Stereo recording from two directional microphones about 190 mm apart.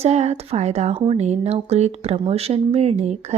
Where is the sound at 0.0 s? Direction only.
35° right (ahead or behind).